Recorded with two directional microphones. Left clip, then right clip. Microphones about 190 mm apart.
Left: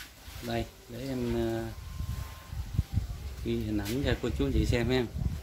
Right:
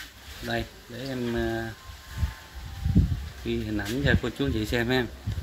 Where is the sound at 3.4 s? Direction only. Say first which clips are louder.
Right 3 dB; centre (ahead or behind).